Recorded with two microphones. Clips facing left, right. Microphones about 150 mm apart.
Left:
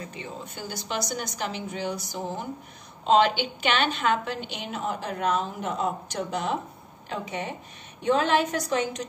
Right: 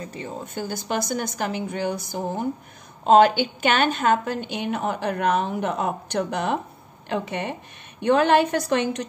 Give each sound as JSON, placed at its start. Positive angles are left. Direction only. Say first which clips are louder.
{"t": 0.1, "sound": "a woman's voice", "louder": "right 5 dB", "side_deg": -45}